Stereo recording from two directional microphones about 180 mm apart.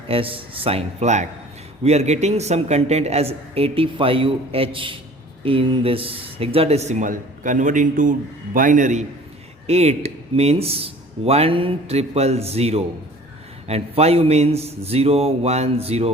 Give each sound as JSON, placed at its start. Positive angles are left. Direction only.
{"t": 0.1, "sound": "a man's voice", "side_deg": -30}